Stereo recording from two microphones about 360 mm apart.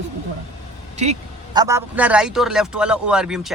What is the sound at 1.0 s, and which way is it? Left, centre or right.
Speech, centre.